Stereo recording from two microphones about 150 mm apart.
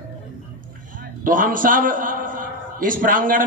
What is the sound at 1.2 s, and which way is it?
A man's voice, 65° right (ahead or behind).